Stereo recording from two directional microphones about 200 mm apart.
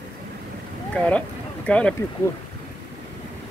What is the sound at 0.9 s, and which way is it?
Speech, 5° left (ahead or behind).